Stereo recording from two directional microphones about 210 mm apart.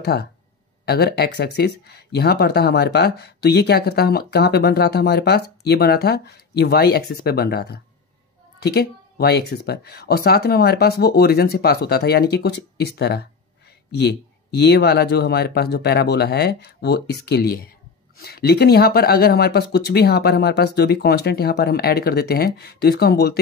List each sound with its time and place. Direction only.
0.0 s speech: 50° left (ahead or behind)
14.6 s speech: 50° left (ahead or behind)